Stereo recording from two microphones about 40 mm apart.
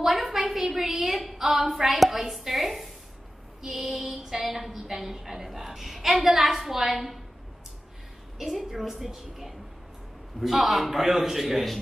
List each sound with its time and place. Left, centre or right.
0.0 s a sound: centre
0.6 s a woman's voice: centre
8.4 s a woman's voice: centre